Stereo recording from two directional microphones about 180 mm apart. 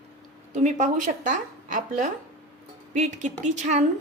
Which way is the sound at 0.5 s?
45° right (ahead or behind).